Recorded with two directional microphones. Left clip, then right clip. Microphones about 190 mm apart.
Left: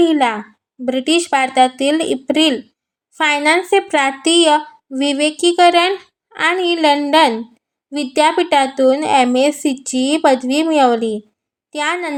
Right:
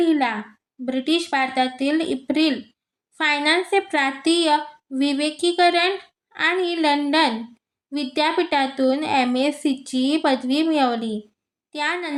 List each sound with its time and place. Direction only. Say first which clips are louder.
0.0 s a woman's voice: left 6 dB; 40° left (ahead or behind)